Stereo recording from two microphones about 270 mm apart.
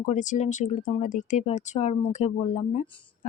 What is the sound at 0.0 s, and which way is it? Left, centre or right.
Speech, left.